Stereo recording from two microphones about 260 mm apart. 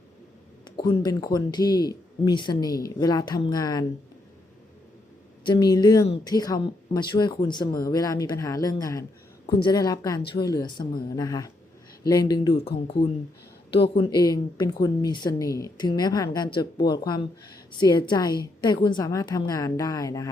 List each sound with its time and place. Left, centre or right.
0.6 s speech: centre
5.5 s speech: centre
13.9 s speech: centre